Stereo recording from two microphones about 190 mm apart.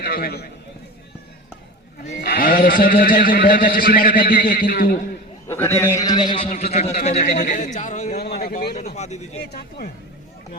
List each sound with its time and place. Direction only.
0.0 s a man's voice: 55° left (ahead or behind)
2.2 s a man's voice: 55° left (ahead or behind)
5.5 s a man's voice: 10° left (ahead or behind); by 8.1 s 40° left (ahead or behind)
8.1 s a man's voice: 55° left (ahead or behind); by 9.4 s 35° left (ahead or behind)